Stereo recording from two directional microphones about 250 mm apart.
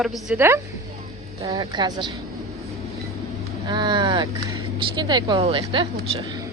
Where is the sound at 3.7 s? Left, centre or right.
Centre.